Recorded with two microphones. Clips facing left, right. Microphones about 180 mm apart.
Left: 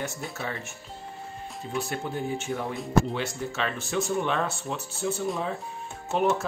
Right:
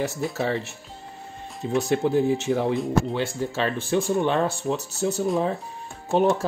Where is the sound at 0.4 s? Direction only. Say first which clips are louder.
Right 9 dB; 35° right (ahead or behind).